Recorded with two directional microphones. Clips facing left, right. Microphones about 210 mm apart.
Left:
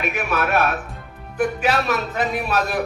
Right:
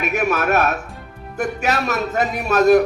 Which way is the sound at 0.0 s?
45° right (ahead or behind).